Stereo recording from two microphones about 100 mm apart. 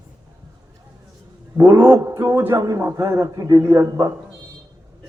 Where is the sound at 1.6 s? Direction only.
25° right (ahead or behind).